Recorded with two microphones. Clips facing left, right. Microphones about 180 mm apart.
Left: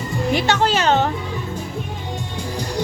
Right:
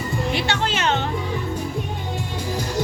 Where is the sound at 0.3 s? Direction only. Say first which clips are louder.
Left 8 dB; 40° left (ahead or behind).